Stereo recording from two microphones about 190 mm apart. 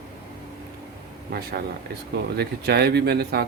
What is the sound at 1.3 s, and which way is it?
Speech, 55° right (ahead or behind).